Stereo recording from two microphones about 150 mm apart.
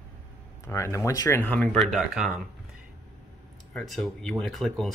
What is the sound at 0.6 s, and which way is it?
Speech, 20° left (ahead or behind).